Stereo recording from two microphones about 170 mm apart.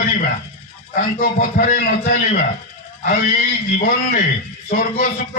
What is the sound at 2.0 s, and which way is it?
Speech, 50° left (ahead or behind).